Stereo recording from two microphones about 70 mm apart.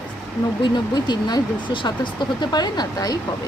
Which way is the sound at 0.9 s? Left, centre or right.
Left.